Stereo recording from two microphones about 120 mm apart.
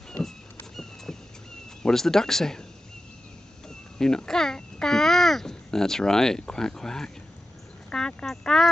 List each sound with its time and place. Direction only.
1.8 s speech: 5° left (ahead or behind)
3.6 s speech: 5° left (ahead or behind)